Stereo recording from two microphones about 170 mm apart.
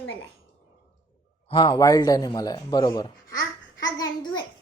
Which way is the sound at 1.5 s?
30° left (ahead or behind).